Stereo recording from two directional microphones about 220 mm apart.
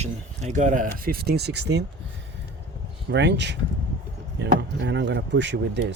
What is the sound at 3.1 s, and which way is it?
Speech, 55° right (ahead or behind).